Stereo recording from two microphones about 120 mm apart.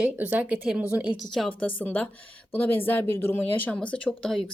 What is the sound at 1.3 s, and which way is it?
Speech, 5° left (ahead or behind).